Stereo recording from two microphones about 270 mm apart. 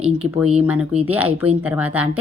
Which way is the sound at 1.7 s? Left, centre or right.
Centre.